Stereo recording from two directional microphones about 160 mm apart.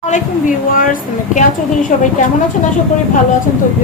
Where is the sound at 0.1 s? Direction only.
55° left (ahead or behind).